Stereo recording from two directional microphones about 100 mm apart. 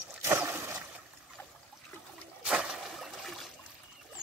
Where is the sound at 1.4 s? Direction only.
20° left (ahead or behind).